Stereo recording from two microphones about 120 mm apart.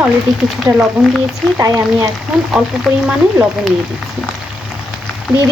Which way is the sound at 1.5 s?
25° right (ahead or behind).